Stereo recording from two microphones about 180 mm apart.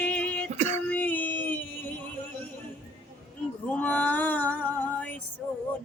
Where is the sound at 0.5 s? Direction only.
40° right (ahead or behind).